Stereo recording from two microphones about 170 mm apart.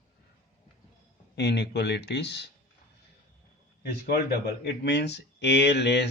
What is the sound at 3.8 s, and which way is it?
Speech, 65° left (ahead or behind).